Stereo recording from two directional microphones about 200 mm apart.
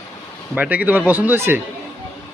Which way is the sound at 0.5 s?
5° right (ahead or behind).